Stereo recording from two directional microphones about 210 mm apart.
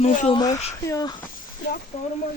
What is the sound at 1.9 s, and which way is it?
Speech, 30° left (ahead or behind).